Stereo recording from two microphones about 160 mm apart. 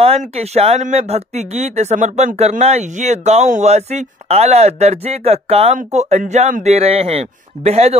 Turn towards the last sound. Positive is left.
turn(degrees=-40)  # may be behind; listen again after turning